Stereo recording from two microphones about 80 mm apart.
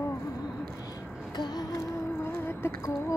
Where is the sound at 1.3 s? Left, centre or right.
Left.